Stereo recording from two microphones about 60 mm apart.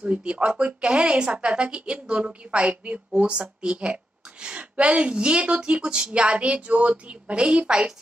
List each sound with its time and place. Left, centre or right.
0.0 s a woman's voice: centre